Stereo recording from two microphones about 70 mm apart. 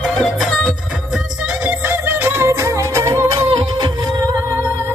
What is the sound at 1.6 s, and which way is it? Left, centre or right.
Music, right.